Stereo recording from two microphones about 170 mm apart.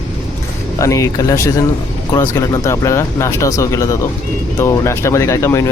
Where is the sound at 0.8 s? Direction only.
20° left (ahead or behind).